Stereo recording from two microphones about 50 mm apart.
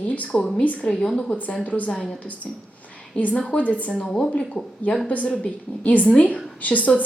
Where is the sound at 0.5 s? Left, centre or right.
Left.